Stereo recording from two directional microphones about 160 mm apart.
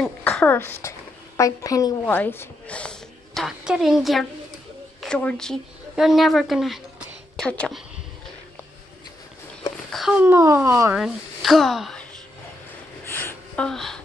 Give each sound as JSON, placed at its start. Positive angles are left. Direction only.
{"t": 0.0, "sound": "a woman's voice", "side_deg": 10}
{"t": 2.0, "sound": "a woman's voice", "side_deg": 10}
{"t": 9.8, "sound": "a sound", "side_deg": 0}
{"t": 10.2, "sound": "speech", "side_deg": -15}
{"t": 11.0, "sound": "speech", "side_deg": 0}
{"t": 13.1, "sound": "gasp", "side_deg": 15}